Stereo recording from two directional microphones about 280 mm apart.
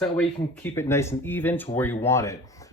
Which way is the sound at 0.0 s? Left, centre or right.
Centre.